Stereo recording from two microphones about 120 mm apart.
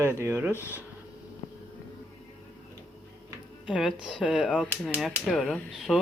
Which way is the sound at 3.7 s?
5° right (ahead or behind).